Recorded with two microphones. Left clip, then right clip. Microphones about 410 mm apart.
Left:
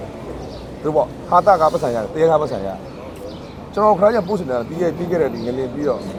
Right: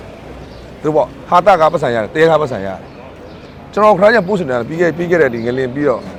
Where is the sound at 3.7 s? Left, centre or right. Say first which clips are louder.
Right 5 dB; right.